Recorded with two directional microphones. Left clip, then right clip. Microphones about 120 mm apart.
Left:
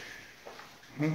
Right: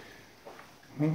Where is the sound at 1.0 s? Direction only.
25° right (ahead or behind).